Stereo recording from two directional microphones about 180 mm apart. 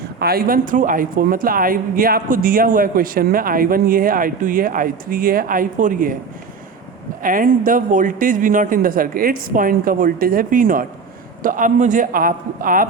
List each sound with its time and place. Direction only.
0.2 s speech: 60° right (ahead or behind)
7.2 s speech: 50° right (ahead or behind)